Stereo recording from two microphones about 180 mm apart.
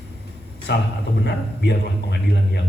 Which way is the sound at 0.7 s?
70° left (ahead or behind).